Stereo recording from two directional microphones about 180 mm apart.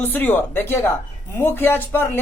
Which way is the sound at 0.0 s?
10° left (ahead or behind).